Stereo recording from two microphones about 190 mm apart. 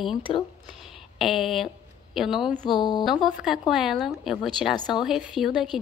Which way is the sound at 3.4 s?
Centre (ahead or behind).